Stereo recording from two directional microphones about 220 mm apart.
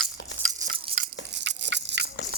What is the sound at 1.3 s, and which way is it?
Biting, 55° right (ahead or behind).